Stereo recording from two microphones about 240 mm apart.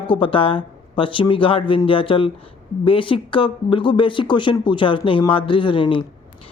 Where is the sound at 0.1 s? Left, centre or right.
Left.